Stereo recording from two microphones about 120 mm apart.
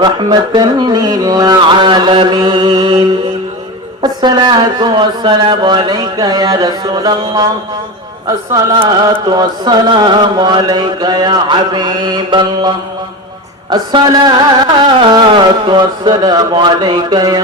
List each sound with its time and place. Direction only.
0.0 s music: 35° right (ahead or behind)
8.5 s music: 30° right (ahead or behind)